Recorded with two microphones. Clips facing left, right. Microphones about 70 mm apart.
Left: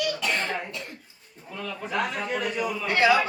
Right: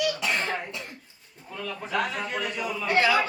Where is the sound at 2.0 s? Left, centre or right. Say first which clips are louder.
Left 1 dB; centre.